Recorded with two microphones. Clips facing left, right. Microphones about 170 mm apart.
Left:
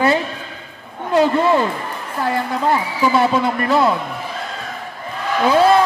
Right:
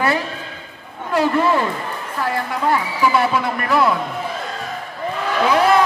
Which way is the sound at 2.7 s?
25° left (ahead or behind).